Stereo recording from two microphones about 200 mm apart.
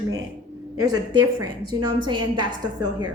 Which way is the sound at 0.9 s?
20° right (ahead or behind).